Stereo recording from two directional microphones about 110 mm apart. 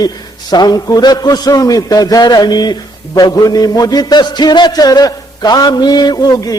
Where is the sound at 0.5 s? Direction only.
40° left (ahead or behind).